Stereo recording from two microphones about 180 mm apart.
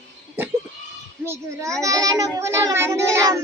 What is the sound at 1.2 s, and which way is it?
A child's voice, 15° right (ahead or behind).